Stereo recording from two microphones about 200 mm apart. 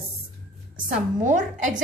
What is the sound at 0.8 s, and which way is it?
Speech, 40° right (ahead or behind).